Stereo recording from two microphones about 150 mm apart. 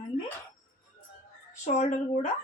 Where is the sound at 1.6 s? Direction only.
50° left (ahead or behind).